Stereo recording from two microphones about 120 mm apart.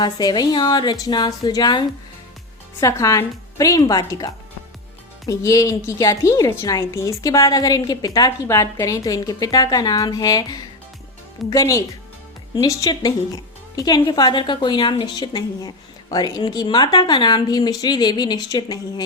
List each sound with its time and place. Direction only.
0.0 s a woman's voice: 35° left (ahead or behind)
2.8 s a woman's voice: 25° left (ahead or behind)